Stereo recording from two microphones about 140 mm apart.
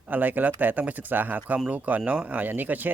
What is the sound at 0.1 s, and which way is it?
Speech, 10° right (ahead or behind).